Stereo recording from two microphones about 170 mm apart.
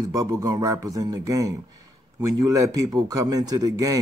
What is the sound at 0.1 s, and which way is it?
A man's voice, 20° right (ahead or behind).